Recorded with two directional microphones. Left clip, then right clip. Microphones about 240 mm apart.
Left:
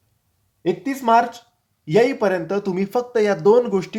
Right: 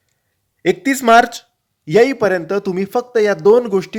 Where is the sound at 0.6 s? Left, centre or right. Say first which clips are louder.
Right 6 dB; right.